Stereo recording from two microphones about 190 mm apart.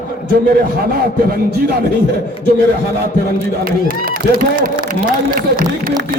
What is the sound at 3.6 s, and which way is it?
A man's voice, 50° right (ahead or behind).